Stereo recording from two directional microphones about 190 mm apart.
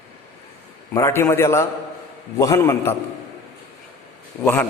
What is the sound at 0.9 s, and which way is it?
A man's voice, 15° left (ahead or behind).